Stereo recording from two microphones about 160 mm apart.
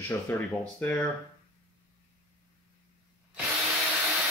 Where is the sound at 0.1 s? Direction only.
10° left (ahead or behind).